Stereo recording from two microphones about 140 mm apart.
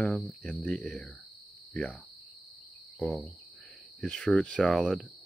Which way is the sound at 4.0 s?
5° left (ahead or behind).